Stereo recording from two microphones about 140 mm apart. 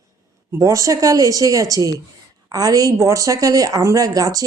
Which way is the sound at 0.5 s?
20° right (ahead or behind).